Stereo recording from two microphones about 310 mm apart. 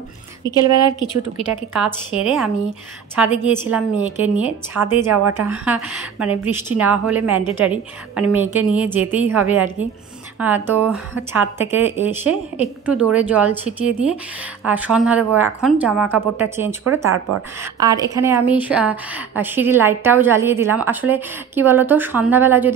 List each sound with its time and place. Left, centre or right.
0.4 s a woman's voice: centre
2.1 s a woman's voice: centre